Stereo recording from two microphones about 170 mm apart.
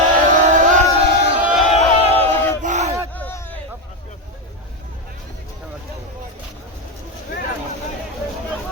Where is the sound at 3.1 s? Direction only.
10° left (ahead or behind).